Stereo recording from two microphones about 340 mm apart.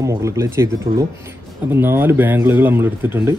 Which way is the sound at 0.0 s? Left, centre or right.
Centre.